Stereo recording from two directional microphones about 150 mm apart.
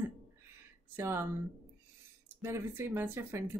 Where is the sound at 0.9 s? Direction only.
15° right (ahead or behind).